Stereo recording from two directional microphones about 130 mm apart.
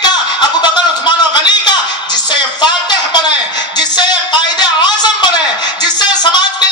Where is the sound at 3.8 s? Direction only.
35° left (ahead or behind).